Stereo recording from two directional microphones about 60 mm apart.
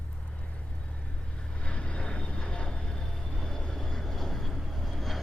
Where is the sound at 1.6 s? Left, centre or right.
Centre.